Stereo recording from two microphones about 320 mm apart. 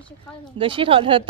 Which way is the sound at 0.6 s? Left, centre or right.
Centre.